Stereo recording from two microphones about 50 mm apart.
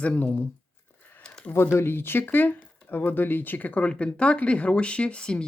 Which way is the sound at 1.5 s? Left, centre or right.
Left.